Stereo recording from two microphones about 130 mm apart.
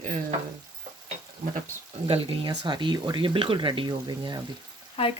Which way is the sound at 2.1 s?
40° right (ahead or behind).